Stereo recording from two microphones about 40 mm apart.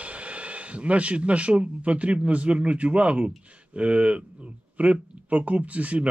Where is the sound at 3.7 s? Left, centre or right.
Right.